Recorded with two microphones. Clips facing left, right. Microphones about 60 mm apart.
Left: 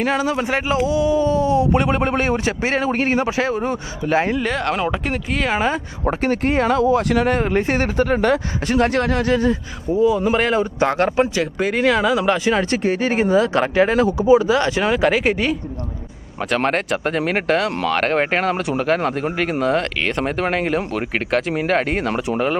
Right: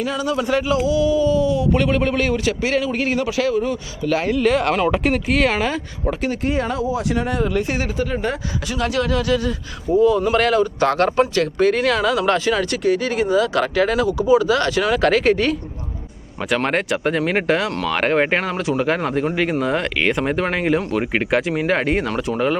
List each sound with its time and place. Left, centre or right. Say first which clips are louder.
0.0 s speech: left 2 dB; left
0.4 s speech: right 1 dB; left
4.4 s speech: right 4 dB; centre
5.5 s speech: left 1 dB; left
6.1 s speech: left 3 dB; left
8.6 s speech: left 3 dB; left
10.2 s speech: right 1 dB; left
12.5 s speech: even; left; by 15.5 s centre
16.6 s speech: even; centre
22.0 s speech: left 1 dB; left